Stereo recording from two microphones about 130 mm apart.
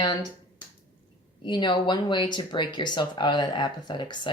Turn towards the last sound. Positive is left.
turn(degrees=35)  # may be behind; listen again after turning